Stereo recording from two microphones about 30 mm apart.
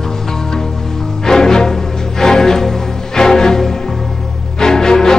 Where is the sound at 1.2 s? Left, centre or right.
Centre.